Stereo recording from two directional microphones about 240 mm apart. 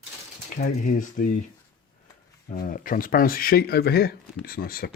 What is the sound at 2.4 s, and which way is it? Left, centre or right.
Speech, left.